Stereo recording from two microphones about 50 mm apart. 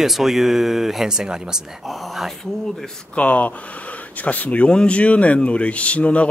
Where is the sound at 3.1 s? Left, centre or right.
Left.